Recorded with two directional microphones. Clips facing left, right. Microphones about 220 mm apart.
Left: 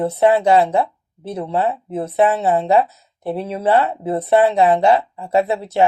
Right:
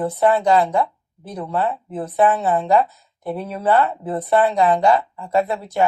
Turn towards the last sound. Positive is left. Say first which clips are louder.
# left 3 dB
turn(degrees=25)  # may be behind; listen again after turning